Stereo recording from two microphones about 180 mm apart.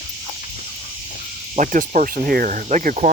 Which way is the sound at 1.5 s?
45° right (ahead or behind).